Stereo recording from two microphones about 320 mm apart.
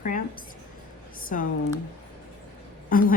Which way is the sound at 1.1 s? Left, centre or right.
Left.